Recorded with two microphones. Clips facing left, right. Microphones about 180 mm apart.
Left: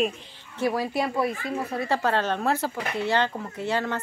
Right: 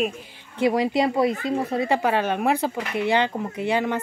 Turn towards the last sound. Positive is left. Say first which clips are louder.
# right 4 dB
turn(degrees=-15)  # may be behind; listen again after turning